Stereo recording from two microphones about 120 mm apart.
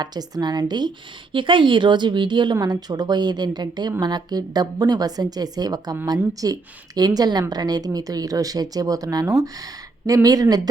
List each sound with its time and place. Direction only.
0.0 s a woman's voice: 35° right (ahead or behind)